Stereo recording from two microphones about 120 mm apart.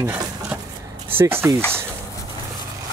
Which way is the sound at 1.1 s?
20° right (ahead or behind).